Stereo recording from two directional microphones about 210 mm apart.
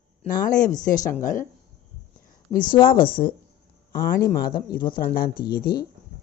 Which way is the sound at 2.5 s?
40° left (ahead or behind).